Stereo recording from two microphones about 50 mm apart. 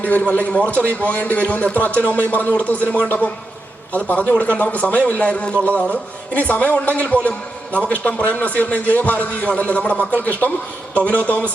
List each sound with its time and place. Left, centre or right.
0.0 s a man's voice: left